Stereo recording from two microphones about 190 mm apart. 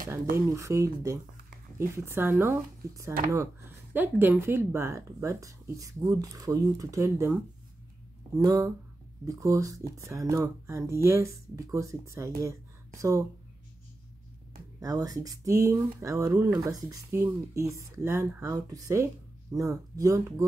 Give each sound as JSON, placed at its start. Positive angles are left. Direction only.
{"t": 0.5, "sound": "speech", "side_deg": -15}
{"t": 8.4, "sound": "speech", "side_deg": -20}
{"t": 14.8, "sound": "speech", "side_deg": -20}